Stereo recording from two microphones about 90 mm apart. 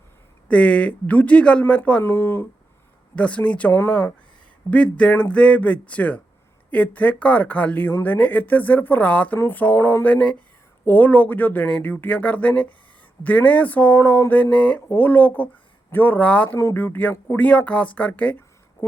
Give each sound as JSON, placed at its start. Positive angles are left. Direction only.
{"t": 0.4, "sound": "speech", "side_deg": 10}
{"t": 3.2, "sound": "speech", "side_deg": 15}
{"t": 4.7, "sound": "speech", "side_deg": 15}
{"t": 10.0, "sound": "speech", "side_deg": 15}
{"t": 18.8, "sound": "a sound", "side_deg": 20}